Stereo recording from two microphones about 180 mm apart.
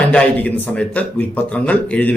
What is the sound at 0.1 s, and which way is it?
Speech, 10° left (ahead or behind).